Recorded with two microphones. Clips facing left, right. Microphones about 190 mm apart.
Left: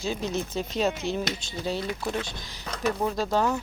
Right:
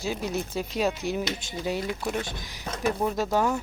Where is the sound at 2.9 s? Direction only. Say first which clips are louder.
Even; 15° right (ahead or behind).